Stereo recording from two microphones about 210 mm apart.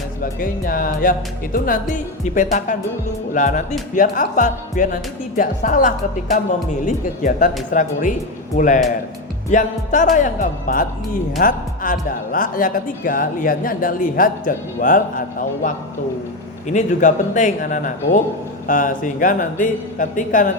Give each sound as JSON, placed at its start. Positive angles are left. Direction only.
{"t": 0.2, "sound": "speech", "side_deg": 40}